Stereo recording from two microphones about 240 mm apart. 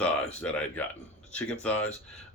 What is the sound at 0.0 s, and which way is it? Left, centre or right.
Speech, centre.